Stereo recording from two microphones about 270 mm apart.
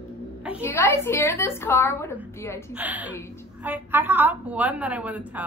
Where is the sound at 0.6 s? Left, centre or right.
Centre.